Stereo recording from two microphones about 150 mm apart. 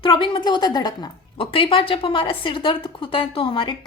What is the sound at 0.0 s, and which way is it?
A woman's voice, 35° left (ahead or behind).